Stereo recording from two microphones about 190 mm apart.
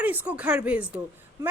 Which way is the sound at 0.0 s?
10° right (ahead or behind).